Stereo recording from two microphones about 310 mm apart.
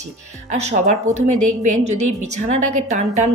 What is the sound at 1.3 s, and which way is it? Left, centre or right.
Speech, right.